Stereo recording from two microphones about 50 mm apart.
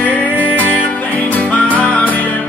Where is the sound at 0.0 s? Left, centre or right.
Left.